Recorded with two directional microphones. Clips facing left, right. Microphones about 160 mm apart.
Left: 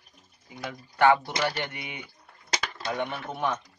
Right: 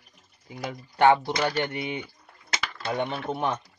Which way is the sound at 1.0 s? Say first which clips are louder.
Right 2 dB; 25° right (ahead or behind).